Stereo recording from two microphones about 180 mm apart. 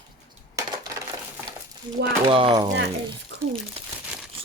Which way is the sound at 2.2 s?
25° right (ahead or behind).